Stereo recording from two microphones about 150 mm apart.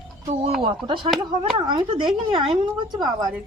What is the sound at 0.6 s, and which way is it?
Speech, 35° right (ahead or behind).